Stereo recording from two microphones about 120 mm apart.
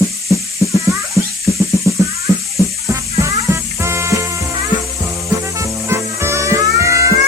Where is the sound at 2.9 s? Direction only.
25° right (ahead or behind).